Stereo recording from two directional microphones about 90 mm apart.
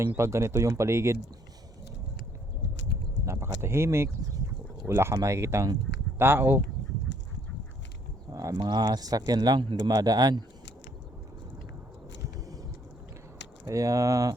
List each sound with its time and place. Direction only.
0.0 s speech: 30° right (ahead or behind)
3.2 s speech: 30° right (ahead or behind)
8.3 s speech: 40° right (ahead or behind)
13.7 s speech: 40° right (ahead or behind)